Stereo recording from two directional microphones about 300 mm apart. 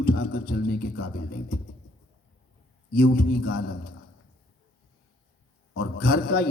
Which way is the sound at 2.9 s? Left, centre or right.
Left.